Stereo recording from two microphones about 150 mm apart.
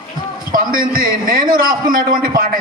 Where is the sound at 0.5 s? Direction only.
70° right (ahead or behind).